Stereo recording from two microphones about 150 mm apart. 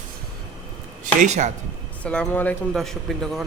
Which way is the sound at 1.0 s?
55° right (ahead or behind).